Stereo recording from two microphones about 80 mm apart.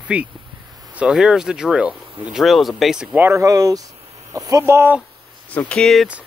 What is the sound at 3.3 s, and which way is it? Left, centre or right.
Speech, right.